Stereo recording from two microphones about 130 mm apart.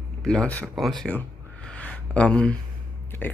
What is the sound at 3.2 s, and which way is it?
Speech, 15° left (ahead or behind).